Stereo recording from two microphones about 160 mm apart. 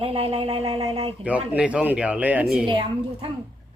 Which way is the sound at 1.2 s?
10° right (ahead or behind).